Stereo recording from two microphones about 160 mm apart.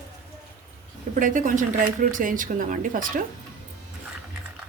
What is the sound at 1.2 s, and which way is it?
A woman's voice, 55° right (ahead or behind).